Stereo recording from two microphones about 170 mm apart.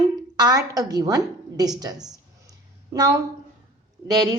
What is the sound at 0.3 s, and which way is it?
A woman's voice, 20° right (ahead or behind).